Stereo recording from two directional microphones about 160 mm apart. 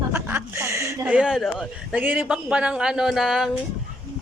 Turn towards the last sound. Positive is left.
turn(degrees=0)  # may be behind; listen again after turning